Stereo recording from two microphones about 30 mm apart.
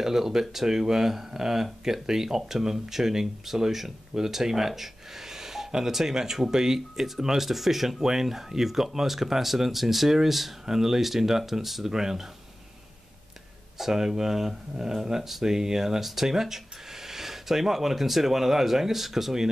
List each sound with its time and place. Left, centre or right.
0.0 s speech: centre
13.7 s speech: centre